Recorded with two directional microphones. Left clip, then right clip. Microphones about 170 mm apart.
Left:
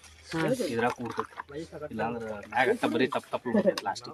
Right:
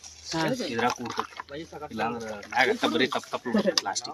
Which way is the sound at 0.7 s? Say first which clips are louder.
Right 2 dB; 15° left (ahead or behind).